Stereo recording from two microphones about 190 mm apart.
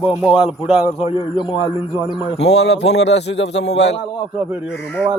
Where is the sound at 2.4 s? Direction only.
65° left (ahead or behind).